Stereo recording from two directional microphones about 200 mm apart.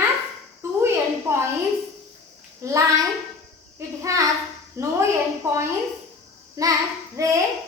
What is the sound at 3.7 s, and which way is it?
A woman's voice, 15° right (ahead or behind).